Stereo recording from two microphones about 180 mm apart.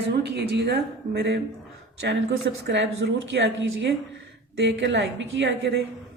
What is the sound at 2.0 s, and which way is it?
A woman's voice, 80° right.